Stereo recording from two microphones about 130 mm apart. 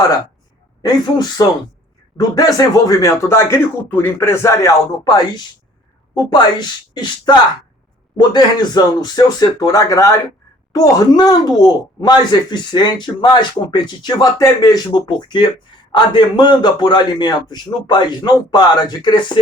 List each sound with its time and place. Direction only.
0.8 s speech: 30° left (ahead or behind)